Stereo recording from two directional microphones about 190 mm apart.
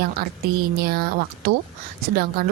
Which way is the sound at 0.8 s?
55° right (ahead or behind).